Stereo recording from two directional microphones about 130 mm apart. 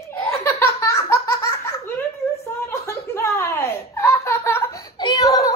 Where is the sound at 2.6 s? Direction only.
20° left (ahead or behind).